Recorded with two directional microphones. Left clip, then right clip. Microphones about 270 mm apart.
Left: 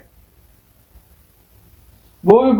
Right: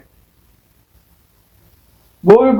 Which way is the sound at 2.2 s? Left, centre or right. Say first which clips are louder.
Right 3 dB; right.